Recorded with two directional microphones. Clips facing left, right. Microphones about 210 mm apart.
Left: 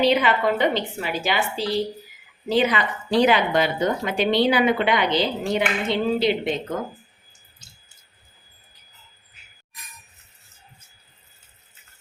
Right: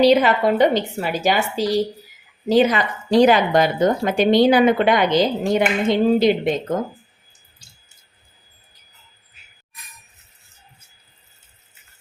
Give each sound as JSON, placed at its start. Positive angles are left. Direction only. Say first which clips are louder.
{"t": 0.0, "sound": "speech", "louder": "right 5 dB", "side_deg": -40}